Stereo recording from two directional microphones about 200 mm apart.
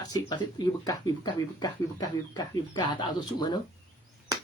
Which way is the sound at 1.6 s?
20° left (ahead or behind).